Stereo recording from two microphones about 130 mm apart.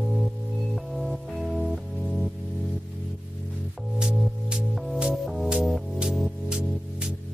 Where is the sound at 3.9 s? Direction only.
5° right (ahead or behind).